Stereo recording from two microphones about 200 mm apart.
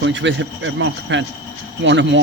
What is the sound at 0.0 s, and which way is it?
Speech, 65° right (ahead or behind).